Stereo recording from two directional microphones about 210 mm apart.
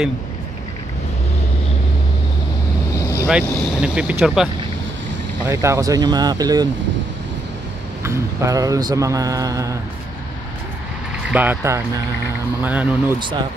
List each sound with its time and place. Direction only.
3.3 s speech: 5° right (ahead or behind)
5.4 s mantra: 15° right (ahead or behind)
8.0 s mantra: 15° right (ahead or behind)
11.3 s mantra: 10° right (ahead or behind)